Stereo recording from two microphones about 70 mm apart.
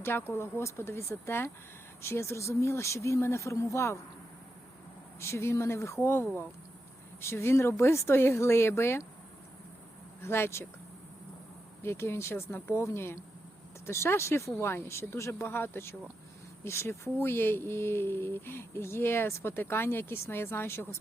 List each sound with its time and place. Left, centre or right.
0.0 s speech: left
5.2 s speech: left
10.2 s speech: left
11.8 s speech: left